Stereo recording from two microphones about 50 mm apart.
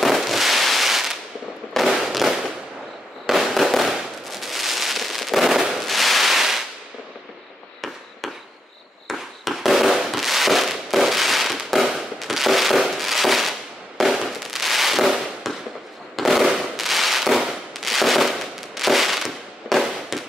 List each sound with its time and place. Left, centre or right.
0.0 s fireworks: centre
5.7 s firecracker: centre
9.0 s fireworks: centre